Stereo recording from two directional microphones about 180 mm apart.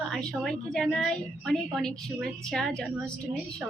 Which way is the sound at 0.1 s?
5° left (ahead or behind).